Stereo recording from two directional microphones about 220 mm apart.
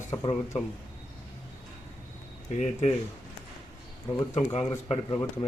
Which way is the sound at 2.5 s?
30° left (ahead or behind).